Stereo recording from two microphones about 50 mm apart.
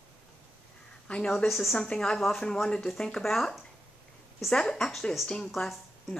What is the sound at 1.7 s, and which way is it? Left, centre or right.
Speech, centre.